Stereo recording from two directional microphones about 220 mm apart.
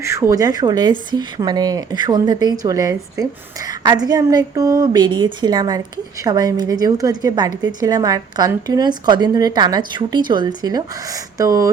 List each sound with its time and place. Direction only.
0.0 s a woman's voice: 15° right (ahead or behind)